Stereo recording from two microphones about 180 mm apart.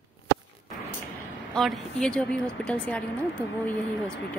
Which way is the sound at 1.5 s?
Centre (ahead or behind).